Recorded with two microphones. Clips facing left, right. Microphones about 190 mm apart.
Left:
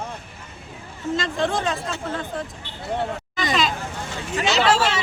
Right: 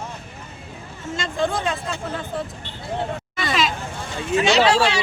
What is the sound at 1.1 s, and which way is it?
Speech, centre (ahead or behind).